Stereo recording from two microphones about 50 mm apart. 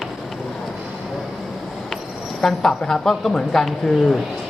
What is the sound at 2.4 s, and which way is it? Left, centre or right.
Speech, centre.